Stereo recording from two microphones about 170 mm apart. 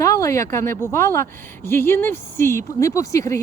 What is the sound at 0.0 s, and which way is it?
A woman's voice, 20° left (ahead or behind).